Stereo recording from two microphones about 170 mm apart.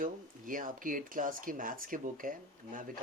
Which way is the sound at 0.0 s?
55° right (ahead or behind).